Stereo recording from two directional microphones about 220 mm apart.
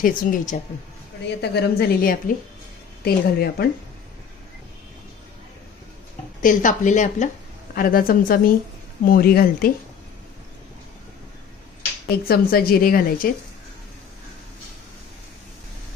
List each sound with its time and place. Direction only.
0.0 s a woman's voice: 40° left (ahead or behind)
6.4 s a woman's voice: 35° left (ahead or behind)
12.3 s a woman's voice: 45° left (ahead or behind)